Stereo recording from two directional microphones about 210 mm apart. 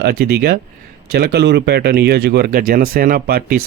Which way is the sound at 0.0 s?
50° right (ahead or behind).